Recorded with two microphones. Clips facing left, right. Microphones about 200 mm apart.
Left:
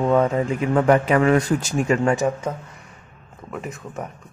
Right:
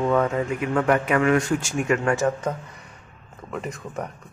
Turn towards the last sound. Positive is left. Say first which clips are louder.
# even
turn(degrees=0)  # may be behind; listen again after turning